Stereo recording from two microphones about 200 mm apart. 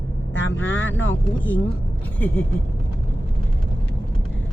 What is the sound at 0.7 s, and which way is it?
Speech, 70° left (ahead or behind).